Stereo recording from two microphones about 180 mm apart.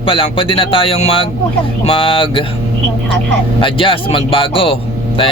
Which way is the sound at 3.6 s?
30° left (ahead or behind).